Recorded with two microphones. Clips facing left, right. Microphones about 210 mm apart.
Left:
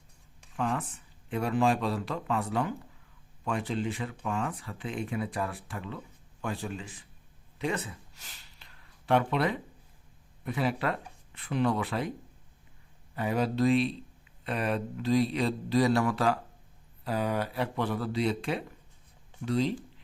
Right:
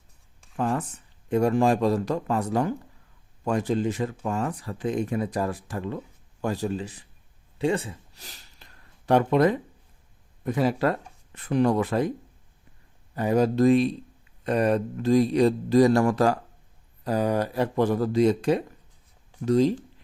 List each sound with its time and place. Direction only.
0.5 s speech: 40° right (ahead or behind)
7.6 s a sound: 30° right (ahead or behind)
10.4 s speech: 40° right (ahead or behind)
13.1 s speech: 45° right (ahead or behind)